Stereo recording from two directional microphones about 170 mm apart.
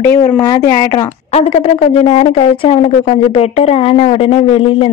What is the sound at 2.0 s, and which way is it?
Speech, 35° left (ahead or behind).